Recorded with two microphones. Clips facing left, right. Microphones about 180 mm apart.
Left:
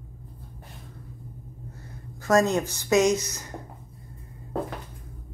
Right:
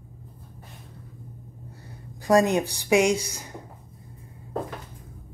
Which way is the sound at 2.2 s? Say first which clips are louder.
Right 2 dB; 15° right (ahead or behind).